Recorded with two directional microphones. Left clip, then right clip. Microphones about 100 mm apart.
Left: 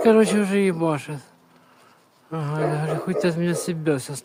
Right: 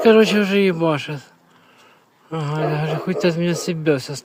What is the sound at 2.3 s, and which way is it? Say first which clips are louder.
Speech: right 2 dB; 15° right (ahead or behind).